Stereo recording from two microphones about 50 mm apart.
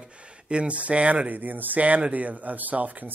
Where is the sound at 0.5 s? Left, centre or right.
Right.